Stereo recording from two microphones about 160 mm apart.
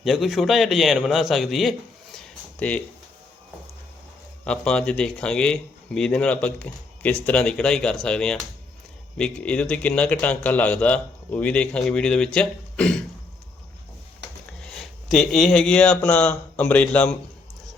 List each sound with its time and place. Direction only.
0.0 s speech: centre (ahead or behind)
2.1 s a sound: 10° left (ahead or behind)
4.4 s a man's voice: 5° left (ahead or behind)
14.7 s speech: centre (ahead or behind)